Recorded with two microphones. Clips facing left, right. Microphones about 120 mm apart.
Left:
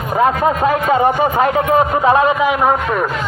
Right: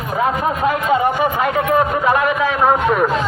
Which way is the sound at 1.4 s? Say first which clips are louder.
Left 3 dB; 25° left (ahead or behind).